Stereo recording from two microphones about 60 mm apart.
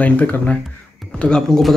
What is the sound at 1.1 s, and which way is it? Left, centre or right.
Speech, centre.